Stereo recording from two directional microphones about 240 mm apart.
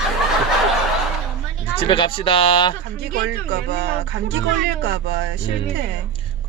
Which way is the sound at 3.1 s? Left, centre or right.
Right.